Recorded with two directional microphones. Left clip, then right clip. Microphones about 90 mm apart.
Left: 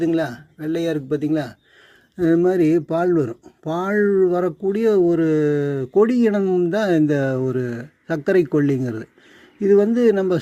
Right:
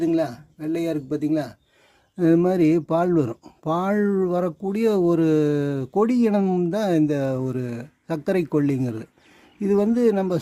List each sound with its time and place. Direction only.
0.0 s speech: centre (ahead or behind)
2.1 s speech: 30° right (ahead or behind)
6.7 s speech: centre (ahead or behind)